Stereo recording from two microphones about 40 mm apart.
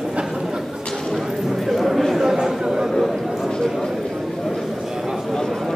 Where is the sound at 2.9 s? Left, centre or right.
Centre.